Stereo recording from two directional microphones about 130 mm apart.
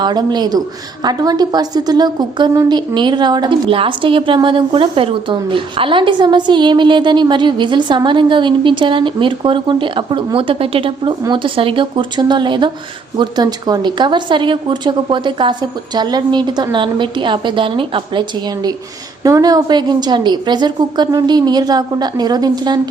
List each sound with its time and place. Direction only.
0.0 s a woman's voice: 35° right (ahead or behind)